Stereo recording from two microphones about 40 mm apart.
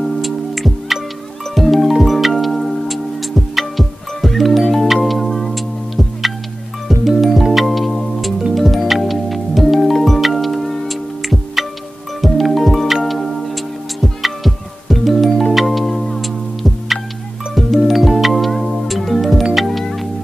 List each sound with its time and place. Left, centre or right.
0.0 s music: centre